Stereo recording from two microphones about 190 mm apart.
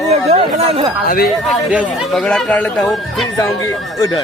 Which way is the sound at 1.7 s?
5° right (ahead or behind).